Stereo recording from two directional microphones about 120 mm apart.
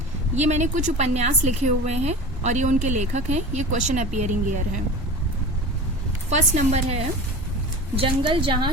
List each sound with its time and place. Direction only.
0.3 s a woman's voice: 75° right (ahead or behind)
6.3 s a woman's voice: 75° right (ahead or behind)
7.9 s a woman's voice: 45° right (ahead or behind)